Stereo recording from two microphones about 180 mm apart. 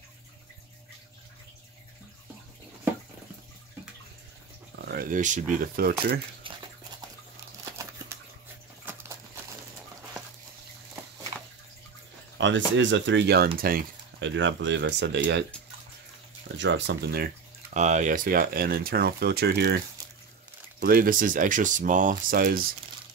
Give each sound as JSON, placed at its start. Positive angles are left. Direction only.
{"t": 4.8, "sound": "speech", "side_deg": -55}
{"t": 7.7, "sound": "a sound", "side_deg": -15}
{"t": 12.4, "sound": "speech", "side_deg": -90}
{"t": 13.6, "sound": "speech", "side_deg": -55}
{"t": 14.2, "sound": "speech", "side_deg": -90}
{"t": 16.5, "sound": "speech", "side_deg": -85}
{"t": 17.7, "sound": "speech", "side_deg": -40}
{"t": 20.8, "sound": "speech", "side_deg": -55}